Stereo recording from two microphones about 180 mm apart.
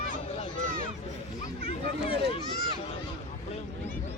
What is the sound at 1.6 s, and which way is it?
Children playing, 30° left (ahead or behind).